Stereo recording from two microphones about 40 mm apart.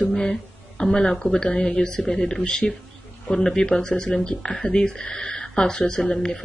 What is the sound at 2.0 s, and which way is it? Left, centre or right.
Speech, centre.